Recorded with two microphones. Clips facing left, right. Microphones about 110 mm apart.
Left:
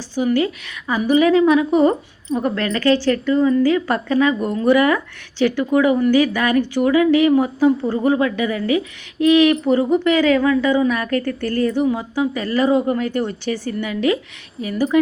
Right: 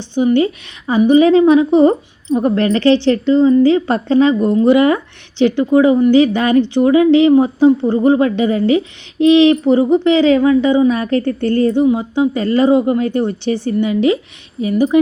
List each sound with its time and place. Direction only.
0.1 s speech: 20° right (ahead or behind)